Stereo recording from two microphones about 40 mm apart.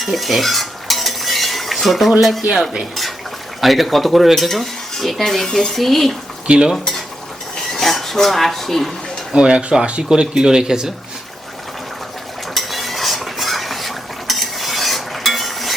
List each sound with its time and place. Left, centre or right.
0.0 s stir: centre
3.6 s speech: centre
6.5 s stir: right
7.7 s a sound: centre
9.3 s speech: right
10.1 s speech: centre
12.5 s stir: centre